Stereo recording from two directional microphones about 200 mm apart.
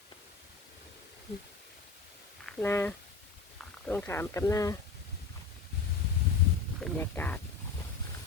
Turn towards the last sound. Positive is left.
turn(degrees=10)  # may be behind; listen again after turning